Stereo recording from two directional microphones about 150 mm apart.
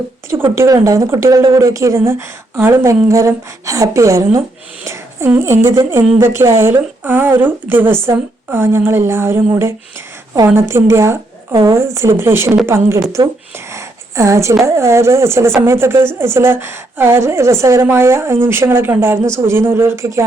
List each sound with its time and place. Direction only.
0.5 s a woman's voice: 20° right (ahead or behind)
13.2 s a woman's voice: 25° right (ahead or behind)